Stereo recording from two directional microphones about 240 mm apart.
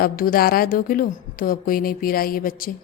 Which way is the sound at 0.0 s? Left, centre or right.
Left.